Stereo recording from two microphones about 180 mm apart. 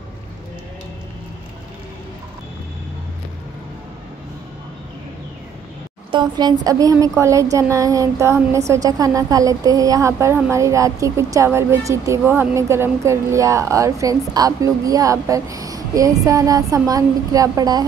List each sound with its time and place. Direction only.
6.1 s a woman's voice: 25° right (ahead or behind)